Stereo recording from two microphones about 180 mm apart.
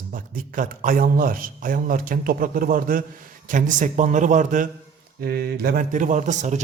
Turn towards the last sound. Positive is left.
turn(degrees=-40)  # may be behind; listen again after turning